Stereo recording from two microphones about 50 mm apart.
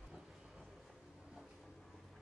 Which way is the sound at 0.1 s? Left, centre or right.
Centre.